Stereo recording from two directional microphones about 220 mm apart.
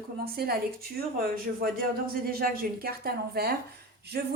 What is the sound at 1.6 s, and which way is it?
A woman's voice, 40° right (ahead or behind).